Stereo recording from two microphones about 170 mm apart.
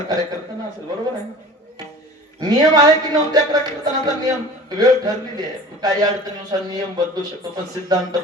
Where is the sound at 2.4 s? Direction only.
25° right (ahead or behind).